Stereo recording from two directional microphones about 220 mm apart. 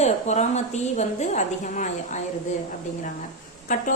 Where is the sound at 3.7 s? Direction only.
35° left (ahead or behind).